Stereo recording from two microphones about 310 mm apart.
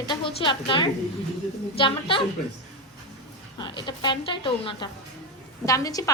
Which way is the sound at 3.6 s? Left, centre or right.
Centre.